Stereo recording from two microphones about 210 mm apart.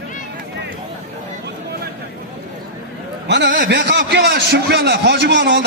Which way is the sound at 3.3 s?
55° right (ahead or behind).